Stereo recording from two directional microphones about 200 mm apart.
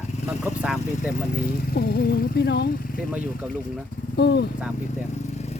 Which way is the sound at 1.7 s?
50° left (ahead or behind).